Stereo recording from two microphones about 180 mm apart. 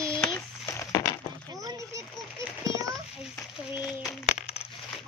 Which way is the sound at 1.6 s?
20° right (ahead or behind).